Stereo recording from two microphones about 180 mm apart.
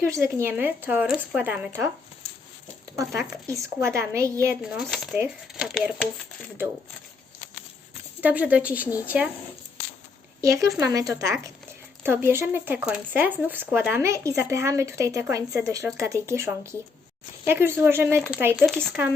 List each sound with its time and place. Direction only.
0.0 s speech: 15° right (ahead or behind)
3.2 s speech: 15° right (ahead or behind)
4.6 s speech: centre (ahead or behind)
8.2 s speech: 10° right (ahead or behind)
10.4 s speech: 15° right (ahead or behind)
18.6 s speech: 5° left (ahead or behind)